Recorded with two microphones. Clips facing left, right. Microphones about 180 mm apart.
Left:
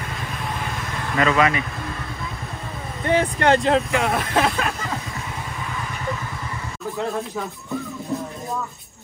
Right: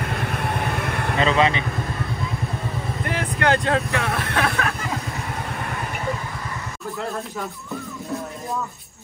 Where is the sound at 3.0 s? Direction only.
25° left (ahead or behind).